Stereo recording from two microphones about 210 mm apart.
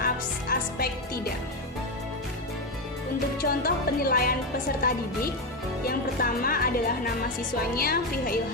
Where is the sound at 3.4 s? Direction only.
45° left (ahead or behind).